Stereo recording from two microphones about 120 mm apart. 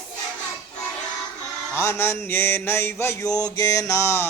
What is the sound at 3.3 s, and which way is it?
Speech, 30° left (ahead or behind).